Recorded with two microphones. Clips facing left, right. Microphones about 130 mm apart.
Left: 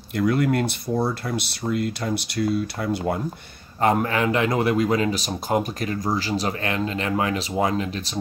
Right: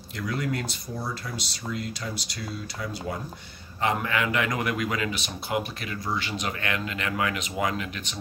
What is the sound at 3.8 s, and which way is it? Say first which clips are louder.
Speech: left 6 dB; 40° left (ahead or behind).